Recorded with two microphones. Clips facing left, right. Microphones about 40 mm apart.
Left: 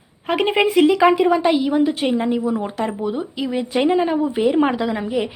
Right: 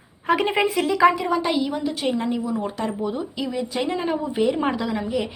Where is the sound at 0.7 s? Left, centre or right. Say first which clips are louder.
Left 5 dB; left.